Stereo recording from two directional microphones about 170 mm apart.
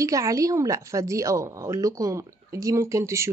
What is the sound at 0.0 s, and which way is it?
A woman's voice, 20° right (ahead or behind).